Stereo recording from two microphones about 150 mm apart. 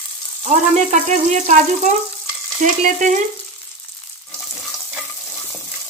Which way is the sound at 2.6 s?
55° right (ahead or behind).